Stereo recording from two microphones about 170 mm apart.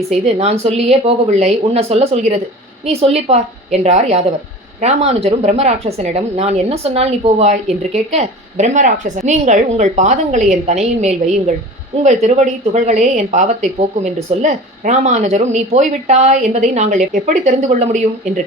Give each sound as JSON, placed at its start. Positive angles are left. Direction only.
{"t": 0.1, "sound": "a woman's voice", "side_deg": -40}